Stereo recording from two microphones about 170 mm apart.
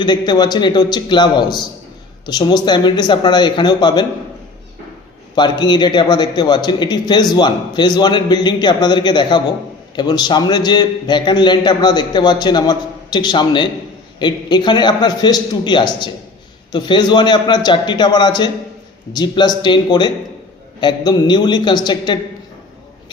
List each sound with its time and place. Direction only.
0.0 s a man's voice: 25° left (ahead or behind)
5.3 s a man's voice: 25° left (ahead or behind)